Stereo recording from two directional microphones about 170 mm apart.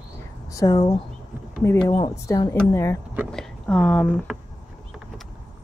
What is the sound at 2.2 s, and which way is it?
Speech, 20° left (ahead or behind).